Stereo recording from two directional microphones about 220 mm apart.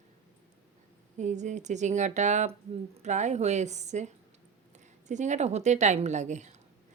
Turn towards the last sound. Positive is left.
turn(degrees=-30)  # may be behind; listen again after turning